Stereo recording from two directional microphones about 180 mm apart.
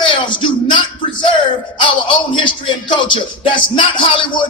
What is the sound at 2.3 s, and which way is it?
Music, 25° left (ahead or behind).